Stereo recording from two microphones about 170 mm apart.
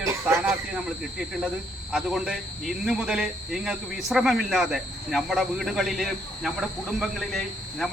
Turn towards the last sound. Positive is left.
turn(degrees=0)  # may be behind; listen again after turning